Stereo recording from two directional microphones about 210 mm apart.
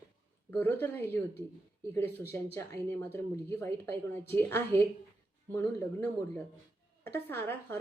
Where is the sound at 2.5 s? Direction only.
10° left (ahead or behind).